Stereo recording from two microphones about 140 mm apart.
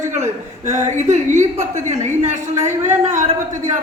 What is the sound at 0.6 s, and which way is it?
A man's voice, 55° right (ahead or behind).